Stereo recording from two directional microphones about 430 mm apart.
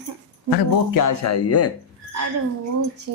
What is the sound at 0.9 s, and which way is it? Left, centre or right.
Speech, left.